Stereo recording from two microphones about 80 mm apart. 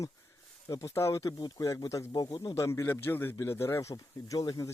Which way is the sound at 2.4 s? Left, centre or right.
Left.